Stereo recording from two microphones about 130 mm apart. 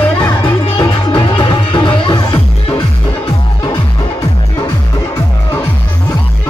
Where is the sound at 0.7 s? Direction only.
40° left (ahead or behind).